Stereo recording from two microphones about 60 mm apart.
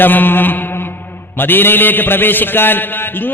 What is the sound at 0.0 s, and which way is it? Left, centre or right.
A man's voice, left.